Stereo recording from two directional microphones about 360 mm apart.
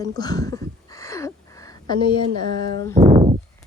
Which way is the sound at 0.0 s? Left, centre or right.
Centre.